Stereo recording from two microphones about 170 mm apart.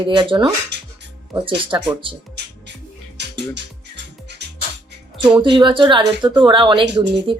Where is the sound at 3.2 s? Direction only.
90° right.